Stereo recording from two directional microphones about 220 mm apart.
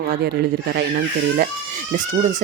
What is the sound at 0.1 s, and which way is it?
Speech, 45° right (ahead or behind).